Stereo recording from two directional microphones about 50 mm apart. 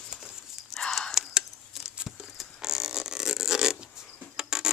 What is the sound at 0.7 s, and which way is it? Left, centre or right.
Whispering, centre.